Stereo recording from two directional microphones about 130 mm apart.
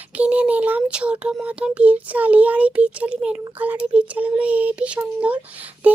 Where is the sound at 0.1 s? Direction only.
10° right (ahead or behind).